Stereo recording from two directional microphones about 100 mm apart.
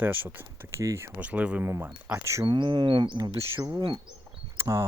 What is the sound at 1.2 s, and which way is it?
Speech, 10° right (ahead or behind).